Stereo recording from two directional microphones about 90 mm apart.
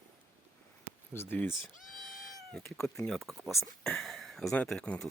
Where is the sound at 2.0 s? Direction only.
5° left (ahead or behind).